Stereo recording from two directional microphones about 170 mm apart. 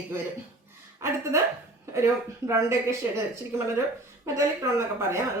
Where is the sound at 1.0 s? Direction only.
15° right (ahead or behind).